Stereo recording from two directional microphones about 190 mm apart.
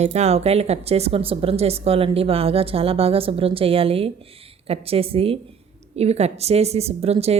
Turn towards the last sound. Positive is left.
turn(degrees=-35)  # may be behind; listen again after turning